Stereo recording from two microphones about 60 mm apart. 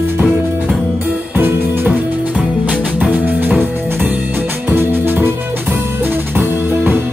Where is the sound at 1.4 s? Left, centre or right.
Right.